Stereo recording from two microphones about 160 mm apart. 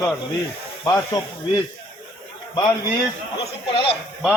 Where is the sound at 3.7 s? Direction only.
35° left (ahead or behind).